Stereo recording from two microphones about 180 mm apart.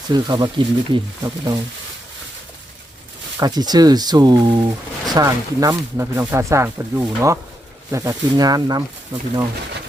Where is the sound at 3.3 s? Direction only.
20° right (ahead or behind).